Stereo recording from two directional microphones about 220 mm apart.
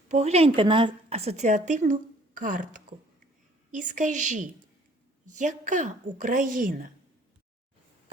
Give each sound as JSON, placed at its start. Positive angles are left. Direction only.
{"t": 0.1, "sound": "a woman's voice", "side_deg": -30}